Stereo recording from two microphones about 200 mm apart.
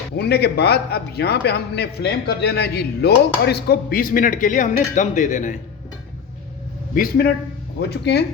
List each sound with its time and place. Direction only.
0.2 s a man's voice: 55° left (ahead or behind)
6.9 s a man's voice: 45° left (ahead or behind)